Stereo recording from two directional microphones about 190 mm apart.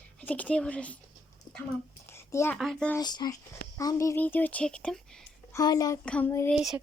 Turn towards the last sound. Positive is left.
turn(degrees=-5)  # may be behind; listen again after turning